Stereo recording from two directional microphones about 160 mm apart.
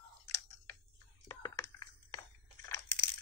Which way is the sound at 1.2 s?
20° left (ahead or behind).